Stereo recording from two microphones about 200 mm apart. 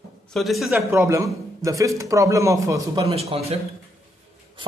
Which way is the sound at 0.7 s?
15° right (ahead or behind).